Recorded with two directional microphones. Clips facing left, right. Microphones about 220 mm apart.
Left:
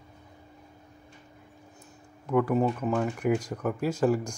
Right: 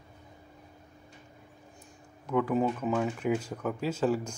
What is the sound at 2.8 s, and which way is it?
Speech, centre (ahead or behind).